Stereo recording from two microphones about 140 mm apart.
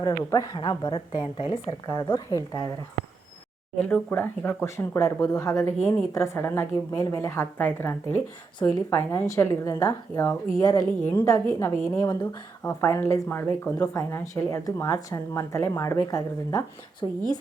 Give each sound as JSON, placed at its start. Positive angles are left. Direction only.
{"t": 0.0, "sound": "speech", "side_deg": 25}
{"t": 0.5, "sound": "a woman's voice", "side_deg": 35}
{"t": 1.9, "sound": "speech", "side_deg": 25}
{"t": 3.8, "sound": "a woman's voice", "side_deg": 15}